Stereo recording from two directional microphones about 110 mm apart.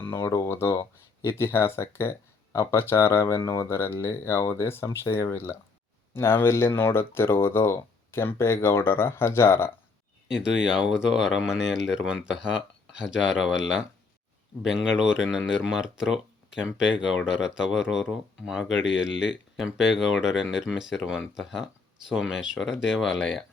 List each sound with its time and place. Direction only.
0.0 s speech: 20° left (ahead or behind)
10.2 s speech: 5° right (ahead or behind)